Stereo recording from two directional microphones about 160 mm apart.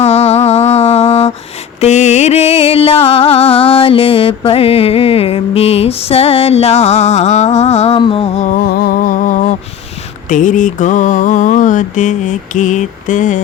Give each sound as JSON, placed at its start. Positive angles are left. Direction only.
{"t": 0.0, "sound": "music", "side_deg": 40}
{"t": 10.2, "sound": "mantra", "side_deg": 55}